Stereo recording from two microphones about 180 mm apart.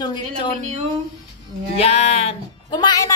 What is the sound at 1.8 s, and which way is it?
Music, 35° left (ahead or behind).